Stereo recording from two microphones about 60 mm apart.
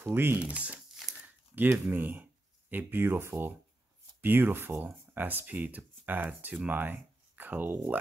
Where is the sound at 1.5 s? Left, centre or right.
Right.